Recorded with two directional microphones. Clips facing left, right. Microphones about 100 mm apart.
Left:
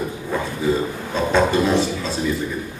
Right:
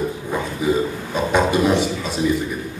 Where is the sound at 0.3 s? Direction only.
15° right (ahead or behind).